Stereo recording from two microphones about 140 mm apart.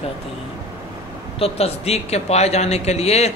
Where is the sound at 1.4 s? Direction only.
45° left (ahead or behind).